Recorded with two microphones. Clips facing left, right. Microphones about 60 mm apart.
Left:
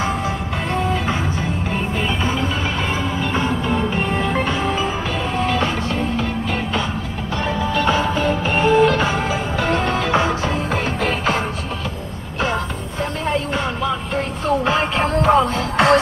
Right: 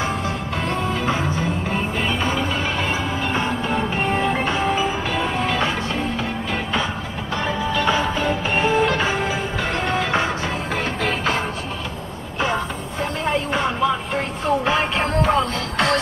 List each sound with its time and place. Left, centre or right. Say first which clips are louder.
3.3 s music: left 3 dB; centre
7.8 s music: left 2 dB; centre
13.2 s a sound: even; centre
14.1 s music: left 1 dB; centre
15.5 s music: left 5 dB; centre